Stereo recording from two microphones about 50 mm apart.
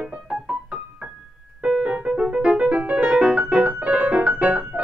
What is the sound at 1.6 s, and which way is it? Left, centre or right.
Music, right.